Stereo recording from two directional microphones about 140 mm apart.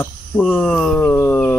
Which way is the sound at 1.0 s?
15° left (ahead or behind).